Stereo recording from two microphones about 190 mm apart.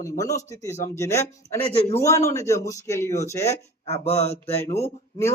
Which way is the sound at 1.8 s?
15° left (ahead or behind).